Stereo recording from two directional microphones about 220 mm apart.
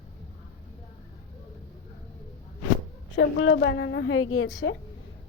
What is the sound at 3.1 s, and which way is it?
A woman's voice, 60° left (ahead or behind).